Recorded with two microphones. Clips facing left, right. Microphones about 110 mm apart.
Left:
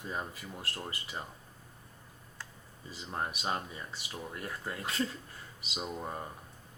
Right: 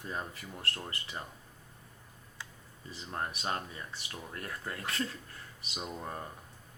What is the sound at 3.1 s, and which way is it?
Speech, 15° left (ahead or behind).